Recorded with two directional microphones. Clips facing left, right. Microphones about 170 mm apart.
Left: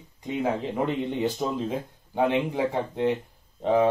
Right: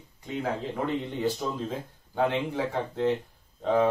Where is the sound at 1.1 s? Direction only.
15° left (ahead or behind).